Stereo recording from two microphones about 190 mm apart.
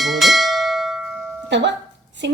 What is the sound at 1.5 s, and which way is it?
Speech, 65° right (ahead or behind).